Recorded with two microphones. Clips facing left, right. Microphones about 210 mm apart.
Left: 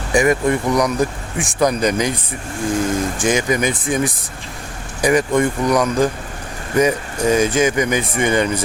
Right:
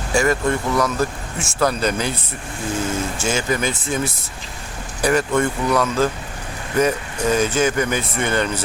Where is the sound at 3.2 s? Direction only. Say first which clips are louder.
Left 4 dB; 15° left (ahead or behind).